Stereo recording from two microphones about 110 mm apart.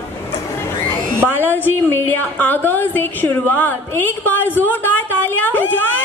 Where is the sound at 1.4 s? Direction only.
20° left (ahead or behind).